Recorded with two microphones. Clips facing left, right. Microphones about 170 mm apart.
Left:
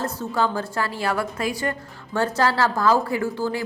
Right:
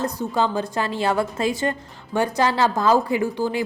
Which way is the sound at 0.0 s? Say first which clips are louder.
Right 1 dB; 20° right (ahead or behind).